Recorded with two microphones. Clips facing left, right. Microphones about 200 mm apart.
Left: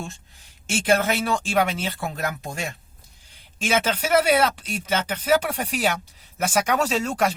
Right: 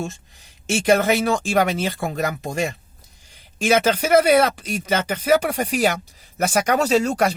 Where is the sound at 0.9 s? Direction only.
45° right (ahead or behind).